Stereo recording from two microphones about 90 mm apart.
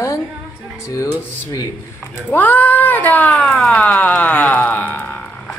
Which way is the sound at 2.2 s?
20° left (ahead or behind).